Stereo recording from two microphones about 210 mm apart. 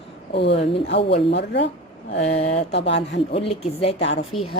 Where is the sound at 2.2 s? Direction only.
30° left (ahead or behind).